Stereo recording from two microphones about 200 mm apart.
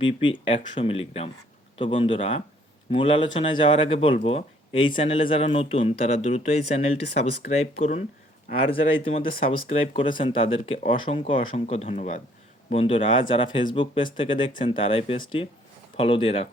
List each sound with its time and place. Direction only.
0.0 s speech: 25° left (ahead or behind)